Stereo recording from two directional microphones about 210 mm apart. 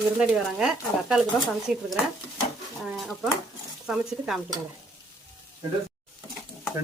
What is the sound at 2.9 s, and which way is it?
Speech, centre (ahead or behind).